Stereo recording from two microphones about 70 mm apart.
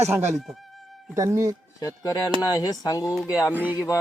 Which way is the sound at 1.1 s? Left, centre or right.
Right.